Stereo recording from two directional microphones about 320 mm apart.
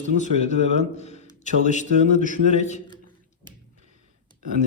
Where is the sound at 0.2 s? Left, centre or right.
Left.